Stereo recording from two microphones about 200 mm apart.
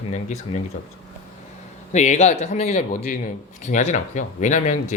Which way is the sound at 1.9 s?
35° left (ahead or behind).